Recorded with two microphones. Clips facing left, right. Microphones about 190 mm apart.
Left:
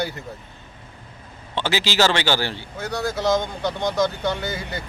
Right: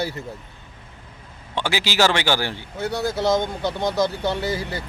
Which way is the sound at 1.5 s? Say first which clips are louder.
Left 1 dB; 15° right (ahead or behind).